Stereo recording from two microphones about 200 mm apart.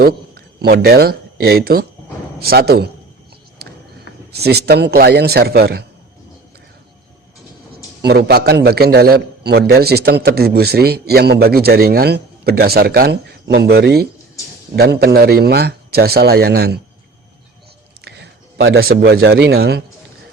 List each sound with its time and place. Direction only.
0.6 s a man's voice: 50° right (ahead or behind)
4.3 s a man's voice: 55° right (ahead or behind)
8.0 s a man's voice: 55° right (ahead or behind)
18.0 s speech: 55° right (ahead or behind)